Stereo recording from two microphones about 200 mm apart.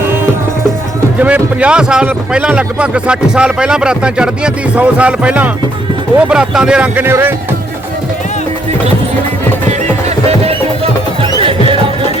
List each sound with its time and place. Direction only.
1.2 s speech: 5° right (ahead or behind)
11.2 s music: 25° right (ahead or behind)